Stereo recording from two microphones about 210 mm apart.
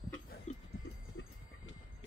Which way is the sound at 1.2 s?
65° left (ahead or behind).